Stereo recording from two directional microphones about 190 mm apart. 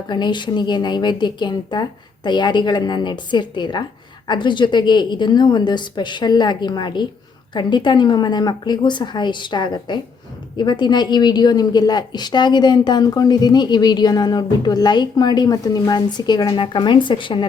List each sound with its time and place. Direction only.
0.1 s a woman's voice: 25° left (ahead or behind)